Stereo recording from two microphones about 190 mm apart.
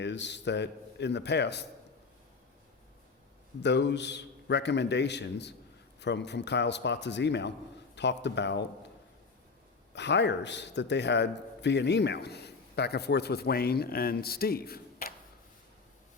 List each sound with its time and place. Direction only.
0.0 s a man's voice: 65° left (ahead or behind)
3.6 s a man's voice: 65° left (ahead or behind)
9.9 s a man's voice: 65° left (ahead or behind)